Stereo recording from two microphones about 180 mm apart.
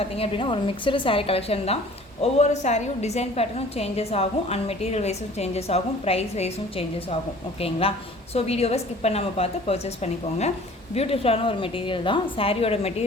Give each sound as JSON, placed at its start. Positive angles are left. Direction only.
{"t": 0.0, "sound": "a woman's voice", "side_deg": 30}